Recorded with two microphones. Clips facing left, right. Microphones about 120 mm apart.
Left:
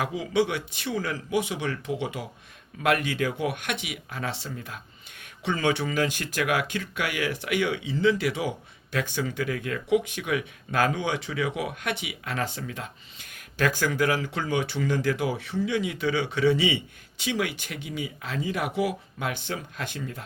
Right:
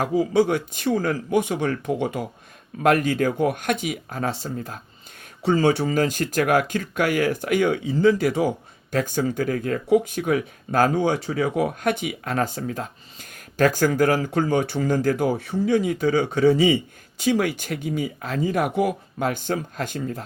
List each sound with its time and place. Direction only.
0.0 s speech: 40° right (ahead or behind)